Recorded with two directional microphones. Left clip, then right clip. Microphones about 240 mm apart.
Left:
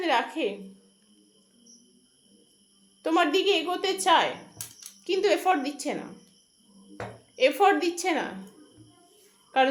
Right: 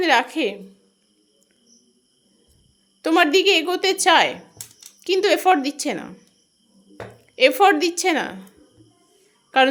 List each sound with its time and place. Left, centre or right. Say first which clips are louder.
0.0 s a woman's voice: right 7 dB; right
3.0 s a woman's voice: right 7 dB; right
7.3 s a woman's voice: right 6 dB; right
9.5 s a woman's voice: right 6 dB; right